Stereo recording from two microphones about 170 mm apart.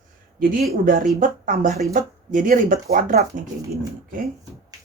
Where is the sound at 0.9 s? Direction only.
55° right (ahead or behind).